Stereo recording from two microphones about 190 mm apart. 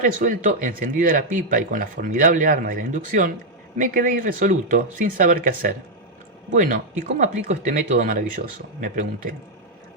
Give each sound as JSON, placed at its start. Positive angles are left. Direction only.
{"t": 0.0, "sound": "speech", "side_deg": -45}